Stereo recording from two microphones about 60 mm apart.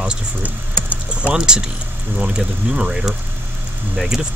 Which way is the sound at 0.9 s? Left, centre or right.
Right.